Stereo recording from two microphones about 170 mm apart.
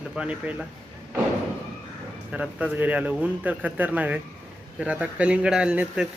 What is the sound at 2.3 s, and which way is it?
A man's voice, 5° right (ahead or behind).